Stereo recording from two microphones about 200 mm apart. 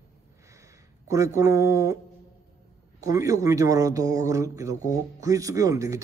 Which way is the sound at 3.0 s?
15° right (ahead or behind).